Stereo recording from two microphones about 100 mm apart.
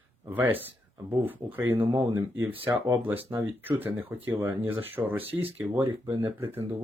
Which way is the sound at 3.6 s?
20° right (ahead or behind).